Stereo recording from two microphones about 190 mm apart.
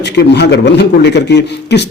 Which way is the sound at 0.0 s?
65° left (ahead or behind).